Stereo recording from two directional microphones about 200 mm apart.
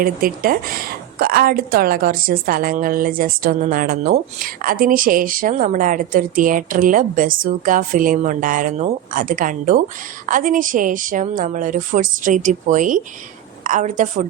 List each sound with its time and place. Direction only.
0.0 s a woman's voice: 45° right (ahead or behind)